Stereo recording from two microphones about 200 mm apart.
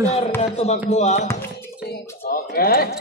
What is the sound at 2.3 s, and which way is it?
Speech, 50° left (ahead or behind).